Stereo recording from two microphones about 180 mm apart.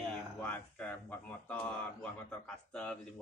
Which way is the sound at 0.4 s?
5° left (ahead or behind).